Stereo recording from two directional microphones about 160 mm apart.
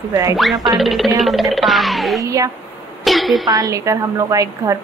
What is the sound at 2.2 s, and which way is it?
Speech, 20° right (ahead or behind).